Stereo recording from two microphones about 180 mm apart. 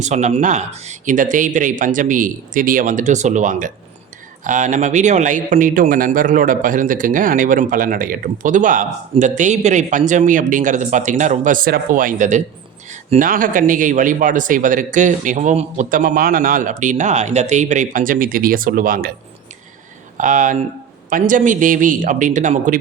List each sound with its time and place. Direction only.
0.0 s speech: 40° right (ahead or behind)
20.1 s speech: 45° right (ahead or behind)